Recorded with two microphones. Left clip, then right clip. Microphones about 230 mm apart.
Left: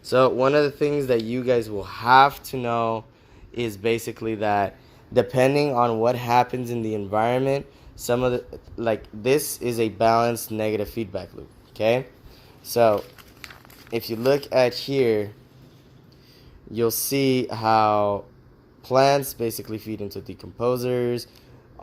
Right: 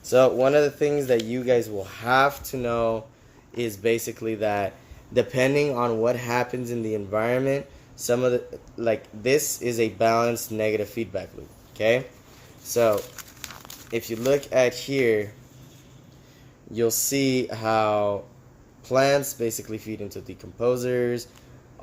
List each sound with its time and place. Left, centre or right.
0.1 s speech: centre
16.7 s speech: left